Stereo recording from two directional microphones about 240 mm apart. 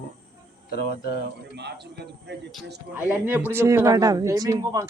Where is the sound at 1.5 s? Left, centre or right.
Right.